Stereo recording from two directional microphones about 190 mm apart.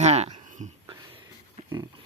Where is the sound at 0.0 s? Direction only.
35° right (ahead or behind).